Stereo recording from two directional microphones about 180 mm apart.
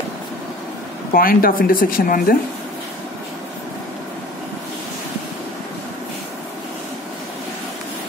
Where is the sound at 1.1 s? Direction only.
55° left (ahead or behind).